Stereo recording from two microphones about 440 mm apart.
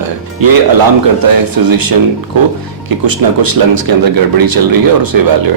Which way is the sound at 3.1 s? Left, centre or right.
Right.